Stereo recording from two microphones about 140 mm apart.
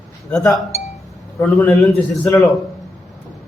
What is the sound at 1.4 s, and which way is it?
Speech, 10° left (ahead or behind).